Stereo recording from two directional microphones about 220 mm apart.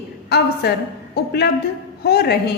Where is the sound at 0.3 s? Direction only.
45° left (ahead or behind).